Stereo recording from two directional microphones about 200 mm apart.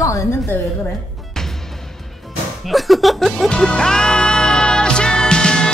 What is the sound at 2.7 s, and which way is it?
Music, centre (ahead or behind).